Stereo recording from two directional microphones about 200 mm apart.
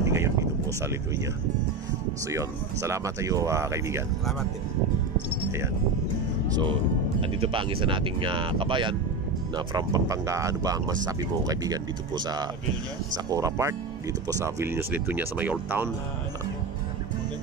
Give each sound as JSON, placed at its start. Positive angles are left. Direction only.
{"t": 0.0, "sound": "a sound", "side_deg": -15}
{"t": 2.3, "sound": "speech", "side_deg": -15}
{"t": 7.2, "sound": "speech", "side_deg": -30}
{"t": 13.1, "sound": "speech", "side_deg": -15}